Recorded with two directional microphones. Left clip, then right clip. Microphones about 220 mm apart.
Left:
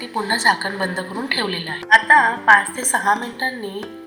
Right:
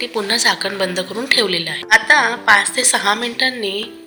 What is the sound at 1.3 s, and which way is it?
Speech, 55° right (ahead or behind).